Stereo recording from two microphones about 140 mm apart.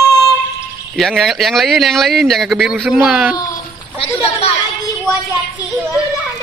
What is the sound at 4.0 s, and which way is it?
Speech, 40° left (ahead or behind).